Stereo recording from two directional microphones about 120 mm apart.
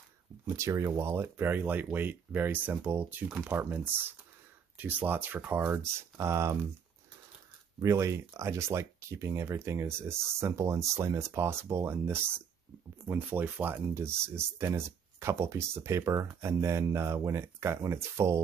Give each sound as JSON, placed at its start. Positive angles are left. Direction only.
{"t": 0.6, "sound": "speech", "side_deg": -25}
{"t": 7.8, "sound": "speech", "side_deg": -25}